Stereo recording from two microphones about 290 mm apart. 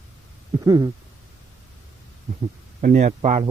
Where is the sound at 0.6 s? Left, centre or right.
Centre.